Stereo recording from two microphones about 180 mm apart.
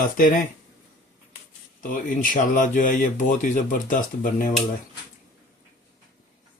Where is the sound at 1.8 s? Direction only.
50° left (ahead or behind).